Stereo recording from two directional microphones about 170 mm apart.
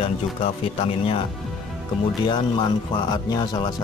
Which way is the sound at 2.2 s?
25° left (ahead or behind).